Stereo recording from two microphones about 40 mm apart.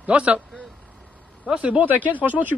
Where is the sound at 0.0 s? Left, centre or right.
Right.